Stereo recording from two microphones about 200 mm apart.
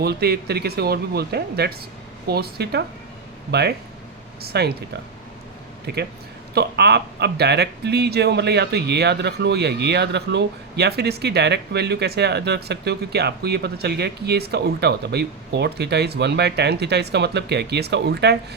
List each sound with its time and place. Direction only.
0.0 s speech: 55° right (ahead or behind)
5.8 s speech: 55° right (ahead or behind)